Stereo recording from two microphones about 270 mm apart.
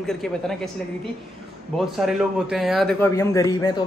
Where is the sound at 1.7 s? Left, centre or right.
Centre.